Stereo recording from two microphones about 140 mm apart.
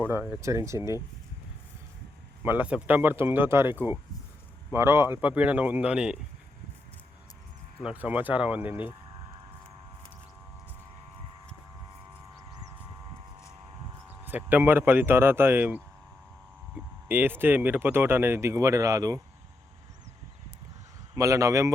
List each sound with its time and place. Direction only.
0.0 s speech: 15° right (ahead or behind)
2.4 s speech: 10° right (ahead or behind)
7.9 s speech: 10° right (ahead or behind)
14.3 s speech: 15° right (ahead or behind)
21.2 s speech: 25° right (ahead or behind)